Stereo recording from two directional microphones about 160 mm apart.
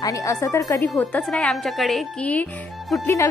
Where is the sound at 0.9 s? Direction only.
5° left (ahead or behind).